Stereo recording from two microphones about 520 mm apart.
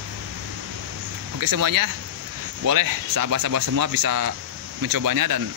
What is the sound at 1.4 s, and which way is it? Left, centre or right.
Speech, right.